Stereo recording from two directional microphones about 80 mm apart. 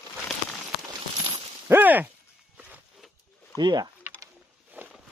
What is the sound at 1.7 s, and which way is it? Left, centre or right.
Speech, right.